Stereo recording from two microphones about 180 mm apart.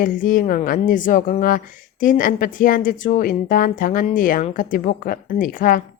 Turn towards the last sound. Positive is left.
turn(degrees=50)  # may be behind; listen again after turning